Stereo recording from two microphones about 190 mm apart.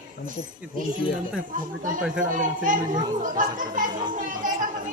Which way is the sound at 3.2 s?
45° right (ahead or behind).